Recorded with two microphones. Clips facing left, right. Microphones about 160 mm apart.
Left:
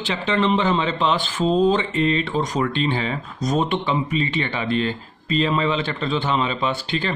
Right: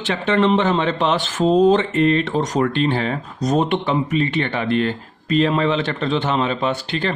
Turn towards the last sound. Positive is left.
turn(degrees=-60)  # may be behind; listen again after turning